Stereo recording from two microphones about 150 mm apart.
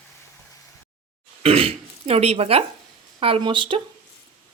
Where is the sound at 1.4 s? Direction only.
40° right (ahead or behind).